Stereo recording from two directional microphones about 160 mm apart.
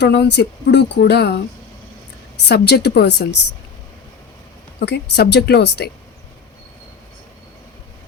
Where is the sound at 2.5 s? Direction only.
90° left.